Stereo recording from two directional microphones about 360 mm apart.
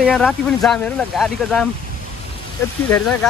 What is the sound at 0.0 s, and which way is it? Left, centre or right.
Speech, centre.